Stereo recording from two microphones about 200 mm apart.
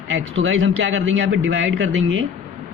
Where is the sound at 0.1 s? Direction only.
70° right (ahead or behind).